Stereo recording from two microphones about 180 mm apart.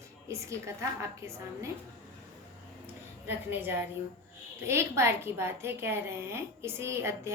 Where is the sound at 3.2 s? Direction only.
10° right (ahead or behind).